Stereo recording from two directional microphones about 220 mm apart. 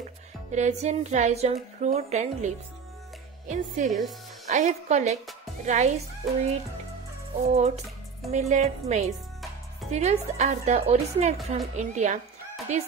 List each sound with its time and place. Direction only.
0.5 s a woman's voice: 30° right (ahead or behind)
7.4 s a woman's voice: 30° right (ahead or behind)